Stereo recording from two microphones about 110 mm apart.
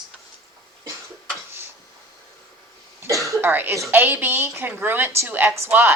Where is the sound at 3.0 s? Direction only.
30° right (ahead or behind).